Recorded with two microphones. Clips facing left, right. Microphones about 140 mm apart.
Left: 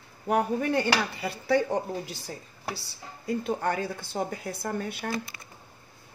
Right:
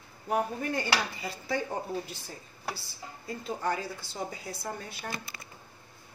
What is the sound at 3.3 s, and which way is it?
A woman's voice, 65° left (ahead or behind).